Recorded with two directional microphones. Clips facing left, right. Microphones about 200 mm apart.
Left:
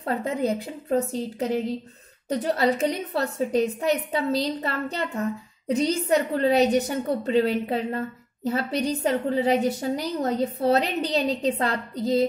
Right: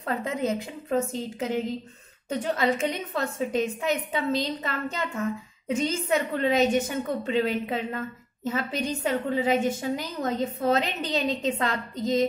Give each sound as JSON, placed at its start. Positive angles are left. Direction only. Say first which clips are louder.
{"t": 0.0, "sound": "a woman's voice", "louder": "left 3 dB", "side_deg": 35}